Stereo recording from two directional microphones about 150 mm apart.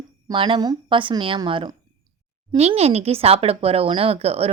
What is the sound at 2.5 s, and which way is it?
Speech, 45° right (ahead or behind).